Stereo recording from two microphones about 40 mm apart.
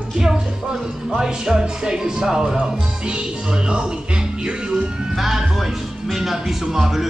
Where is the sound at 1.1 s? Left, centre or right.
Centre.